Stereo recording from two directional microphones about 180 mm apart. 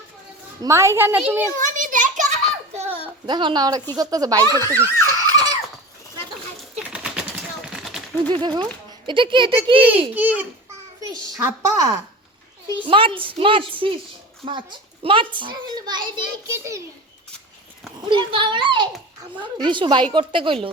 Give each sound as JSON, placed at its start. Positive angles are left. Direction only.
{"t": 0.6, "sound": "a child's voice", "side_deg": -15}
{"t": 1.6, "sound": "a child's voice", "side_deg": -45}
{"t": 3.2, "sound": "a child's voice", "side_deg": -25}
{"t": 4.6, "sound": "a sound", "side_deg": -20}
{"t": 6.7, "sound": "a sound", "side_deg": -5}
{"t": 8.3, "sound": "a child's voice", "side_deg": -25}
{"t": 10.2, "sound": "a child's voice", "side_deg": -10}
{"t": 18.0, "sound": "a child's voice", "side_deg": -25}